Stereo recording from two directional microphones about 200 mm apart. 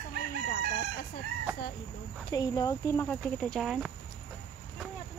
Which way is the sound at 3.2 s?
Centre (ahead or behind).